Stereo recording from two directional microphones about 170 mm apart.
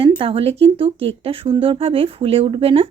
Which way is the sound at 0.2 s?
35° right (ahead or behind).